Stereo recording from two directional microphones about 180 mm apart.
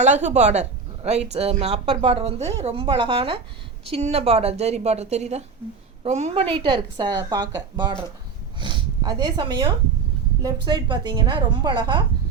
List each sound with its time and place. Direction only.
0.0 s a woman's voice: 40° right (ahead or behind); by 12.0 s 25° right (ahead or behind)